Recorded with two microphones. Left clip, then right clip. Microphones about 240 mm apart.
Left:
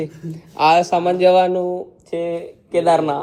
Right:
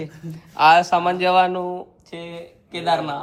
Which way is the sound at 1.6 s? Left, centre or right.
Right.